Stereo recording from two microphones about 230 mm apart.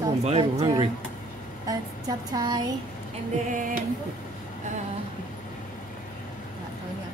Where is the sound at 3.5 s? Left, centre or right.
Right.